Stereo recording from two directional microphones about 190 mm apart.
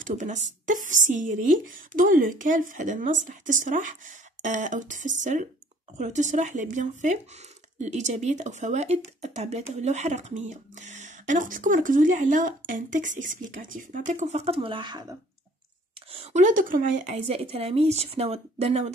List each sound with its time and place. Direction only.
0.0 s speech: 40° right (ahead or behind); by 15.1 s 20° right (ahead or behind)
16.1 s speech: 35° right (ahead or behind)
17.3 s speech: 30° right (ahead or behind)